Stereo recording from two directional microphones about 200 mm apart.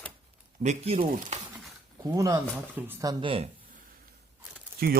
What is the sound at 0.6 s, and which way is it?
Speech, 30° right (ahead or behind).